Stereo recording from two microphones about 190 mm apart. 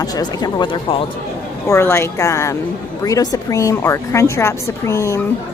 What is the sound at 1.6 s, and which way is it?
A woman's voice, 15° left (ahead or behind).